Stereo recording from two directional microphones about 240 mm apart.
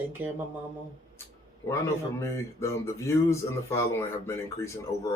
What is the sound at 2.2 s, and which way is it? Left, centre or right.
Speech, centre.